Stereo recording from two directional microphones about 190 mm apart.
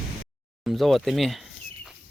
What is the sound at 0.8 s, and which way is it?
Speech, centre (ahead or behind).